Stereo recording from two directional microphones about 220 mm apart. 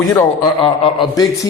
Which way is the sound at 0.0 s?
Centre (ahead or behind).